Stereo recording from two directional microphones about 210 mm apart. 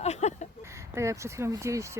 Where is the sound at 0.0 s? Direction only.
30° left (ahead or behind).